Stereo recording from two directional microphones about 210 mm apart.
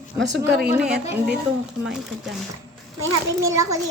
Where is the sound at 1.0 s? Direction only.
10° right (ahead or behind).